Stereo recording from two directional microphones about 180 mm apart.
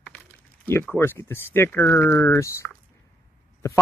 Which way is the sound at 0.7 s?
15° left (ahead or behind).